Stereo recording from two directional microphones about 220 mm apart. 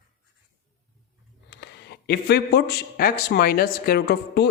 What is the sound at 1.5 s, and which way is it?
Speech, 50° left (ahead or behind).